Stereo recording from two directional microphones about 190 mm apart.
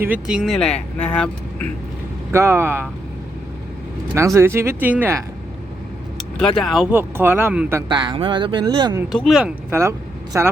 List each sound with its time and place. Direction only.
0.0 s speech: 5° right (ahead or behind)
2.3 s speech: 15° right (ahead or behind)
4.4 s speech: 15° right (ahead or behind)
6.4 s speech: centre (ahead or behind)
7.9 s speech: 25° right (ahead or behind)
9.1 s speech: centre (ahead or behind)